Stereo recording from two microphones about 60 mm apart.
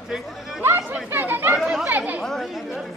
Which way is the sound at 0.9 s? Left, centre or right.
Right.